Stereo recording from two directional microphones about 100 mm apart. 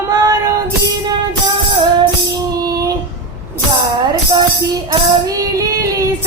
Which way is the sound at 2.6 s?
40° right (ahead or behind).